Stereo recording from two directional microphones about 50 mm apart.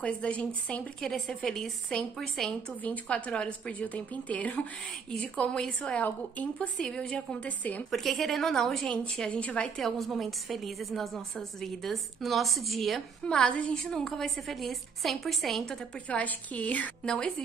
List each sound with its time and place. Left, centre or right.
0.0 s a woman's voice: left
1.1 s a woman's voice: centre
2.8 s a woman's voice: left
5.9 s a woman's voice: left
6.8 s a woman's voice: centre
7.2 s a woman's voice: left
7.9 s a woman's voice: centre
8.8 s a woman's voice: centre
9.8 s a woman's voice: centre
13.2 s a woman's voice: centre
16.1 s a woman's voice: left
17.0 s a woman's voice: centre